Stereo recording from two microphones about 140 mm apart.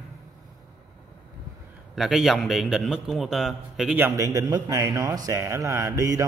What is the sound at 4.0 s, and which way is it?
Speech, 20° right (ahead or behind).